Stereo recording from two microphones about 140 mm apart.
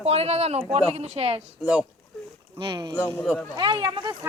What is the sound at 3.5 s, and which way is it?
Speech, 30° right (ahead or behind).